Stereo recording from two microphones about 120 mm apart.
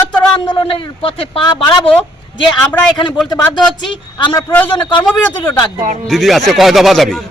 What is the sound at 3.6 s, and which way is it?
Speech, 45° left (ahead or behind).